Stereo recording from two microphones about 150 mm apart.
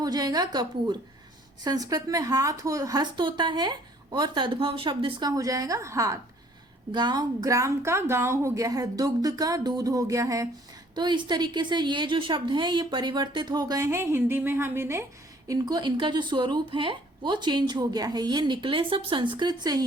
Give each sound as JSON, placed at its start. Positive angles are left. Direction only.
{"t": 0.0, "sound": "a woman's voice", "side_deg": -25}
{"t": 15.4, "sound": "a woman's voice", "side_deg": -25}